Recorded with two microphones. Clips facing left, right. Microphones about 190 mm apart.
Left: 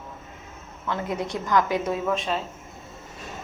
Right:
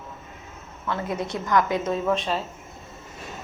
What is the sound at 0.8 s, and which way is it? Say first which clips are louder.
A woman's voice: even; 20° left (ahead or behind).